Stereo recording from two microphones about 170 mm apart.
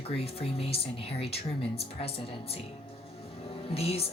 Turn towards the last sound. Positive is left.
turn(degrees=35)  # may be behind; listen again after turning